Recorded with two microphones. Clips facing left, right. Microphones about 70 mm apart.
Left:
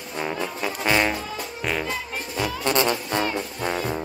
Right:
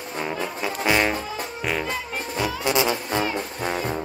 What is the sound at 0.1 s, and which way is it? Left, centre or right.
Brass instrument, centre.